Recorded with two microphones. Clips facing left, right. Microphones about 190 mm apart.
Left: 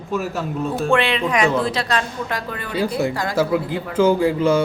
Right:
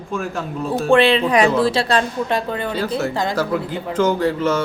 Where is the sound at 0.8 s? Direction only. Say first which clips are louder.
Right 6 dB; 35° right (ahead or behind).